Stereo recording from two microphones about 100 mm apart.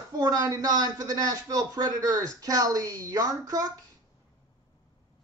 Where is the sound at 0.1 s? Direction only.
40° right (ahead or behind).